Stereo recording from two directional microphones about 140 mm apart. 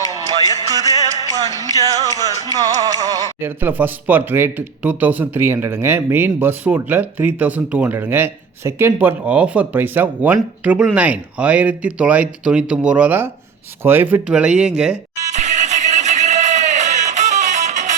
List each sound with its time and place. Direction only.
0.7 s speech: 25° right (ahead or behind)
3.4 s speech: 15° right (ahead or behind)
15.2 s music: 60° right (ahead or behind)